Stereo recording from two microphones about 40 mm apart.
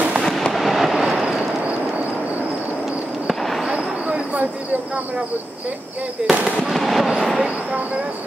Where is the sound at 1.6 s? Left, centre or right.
Right.